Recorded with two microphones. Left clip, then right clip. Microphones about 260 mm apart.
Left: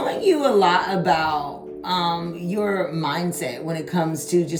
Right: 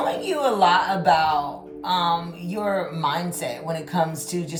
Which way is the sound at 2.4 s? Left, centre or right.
Centre.